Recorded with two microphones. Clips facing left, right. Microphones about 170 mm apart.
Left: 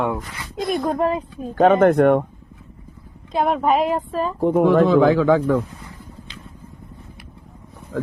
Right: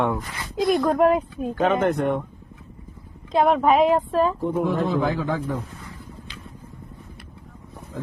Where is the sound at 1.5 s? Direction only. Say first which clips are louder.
Left 7 dB; 50° left (ahead or behind).